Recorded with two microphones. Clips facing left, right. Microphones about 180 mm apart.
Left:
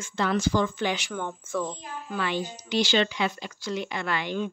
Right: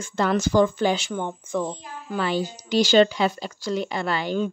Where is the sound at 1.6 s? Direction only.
35° right (ahead or behind).